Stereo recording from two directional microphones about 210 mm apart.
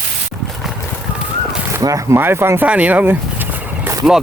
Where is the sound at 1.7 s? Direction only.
15° right (ahead or behind).